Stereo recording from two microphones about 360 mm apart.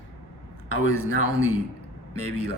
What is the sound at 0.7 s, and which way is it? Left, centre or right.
Speech, left.